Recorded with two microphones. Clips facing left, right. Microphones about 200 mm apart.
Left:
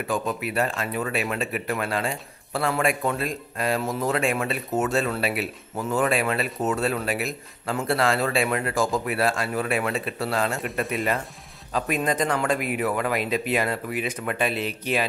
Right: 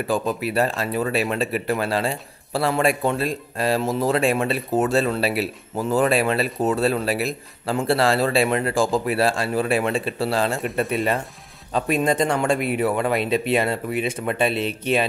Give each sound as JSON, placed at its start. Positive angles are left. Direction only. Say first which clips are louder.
{"t": 0.0, "sound": "speech", "louder": "right 4 dB", "side_deg": -35}
{"t": 11.7, "sound": "speech", "louder": "right 4 dB", "side_deg": -30}